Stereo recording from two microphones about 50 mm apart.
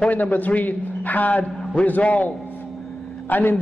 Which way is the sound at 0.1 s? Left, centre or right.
Left.